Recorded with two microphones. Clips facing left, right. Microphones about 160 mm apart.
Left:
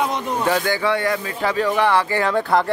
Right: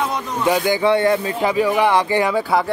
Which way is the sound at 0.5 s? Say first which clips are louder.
Right 5 dB; 15° right (ahead or behind).